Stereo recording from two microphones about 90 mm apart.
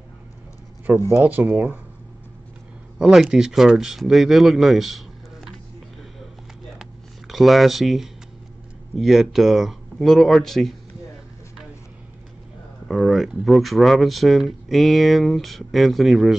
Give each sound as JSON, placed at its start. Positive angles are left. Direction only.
{"t": 0.9, "sound": "speech", "side_deg": -20}
{"t": 3.0, "sound": "speech", "side_deg": -5}
{"t": 6.8, "sound": "a sound", "side_deg": 0}
{"t": 8.9, "sound": "speech", "side_deg": 0}
{"t": 12.8, "sound": "speech", "side_deg": 0}